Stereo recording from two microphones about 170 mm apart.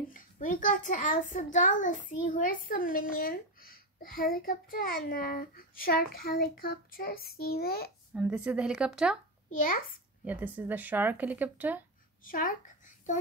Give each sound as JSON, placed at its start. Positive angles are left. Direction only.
{"t": 0.1, "sound": "a child's voice", "side_deg": 50}
{"t": 8.1, "sound": "speech", "side_deg": -5}
{"t": 10.2, "sound": "speech", "side_deg": -10}
{"t": 12.3, "sound": "a child's voice", "side_deg": 50}